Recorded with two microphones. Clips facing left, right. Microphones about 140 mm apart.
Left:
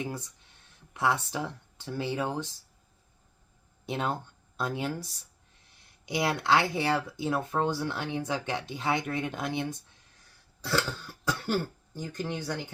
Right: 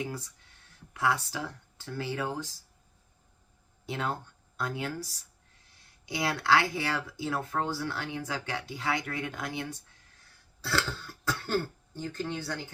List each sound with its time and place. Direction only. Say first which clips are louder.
0.0 s speech: left 1 dB; 20° left (ahead or behind)
3.8 s speech: left 2 dB; 20° left (ahead or behind)
6.1 s speech: left 1 dB; 20° left (ahead or behind)